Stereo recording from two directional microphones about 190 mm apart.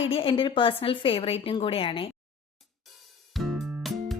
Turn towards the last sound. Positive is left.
turn(degrees=0)  # may be behind; listen again after turning